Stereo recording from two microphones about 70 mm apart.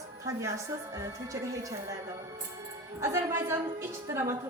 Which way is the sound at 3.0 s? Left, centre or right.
Right.